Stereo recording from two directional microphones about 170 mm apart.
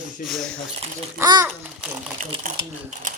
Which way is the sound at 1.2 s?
20° right (ahead or behind).